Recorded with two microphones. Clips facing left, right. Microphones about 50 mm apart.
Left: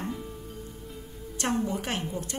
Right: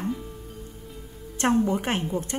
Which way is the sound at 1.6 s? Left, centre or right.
Right.